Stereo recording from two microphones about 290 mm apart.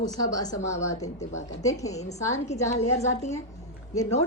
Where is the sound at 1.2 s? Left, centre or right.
Left.